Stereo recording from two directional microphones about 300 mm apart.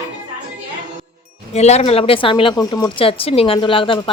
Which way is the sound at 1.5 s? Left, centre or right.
Left.